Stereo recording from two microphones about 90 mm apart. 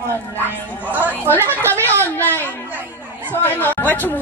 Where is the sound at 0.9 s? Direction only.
20° right (ahead or behind).